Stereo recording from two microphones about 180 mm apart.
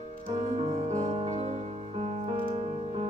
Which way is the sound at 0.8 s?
40° right (ahead or behind).